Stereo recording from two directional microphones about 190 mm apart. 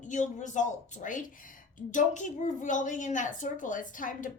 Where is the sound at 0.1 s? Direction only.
40° left (ahead or behind).